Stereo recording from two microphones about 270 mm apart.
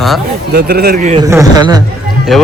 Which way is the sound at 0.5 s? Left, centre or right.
Right.